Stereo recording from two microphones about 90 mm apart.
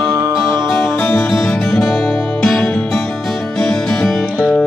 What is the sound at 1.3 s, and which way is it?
Music, 5° left (ahead or behind).